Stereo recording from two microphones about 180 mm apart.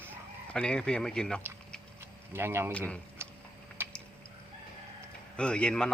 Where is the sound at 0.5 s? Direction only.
5° left (ahead or behind).